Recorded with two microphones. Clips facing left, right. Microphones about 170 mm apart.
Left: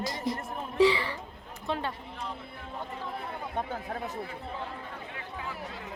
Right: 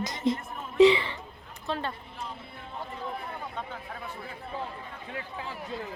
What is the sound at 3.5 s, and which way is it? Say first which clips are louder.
Chatter: left 5 dB; 45° left (ahead or behind).